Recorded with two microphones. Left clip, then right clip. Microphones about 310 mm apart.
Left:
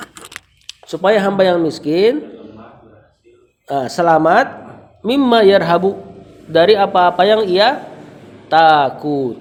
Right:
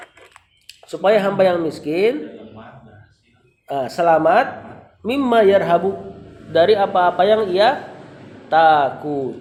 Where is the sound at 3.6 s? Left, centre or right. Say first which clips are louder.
Left 3 dB; left.